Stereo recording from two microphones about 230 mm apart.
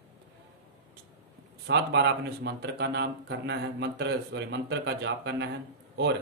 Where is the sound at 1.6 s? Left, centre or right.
Right.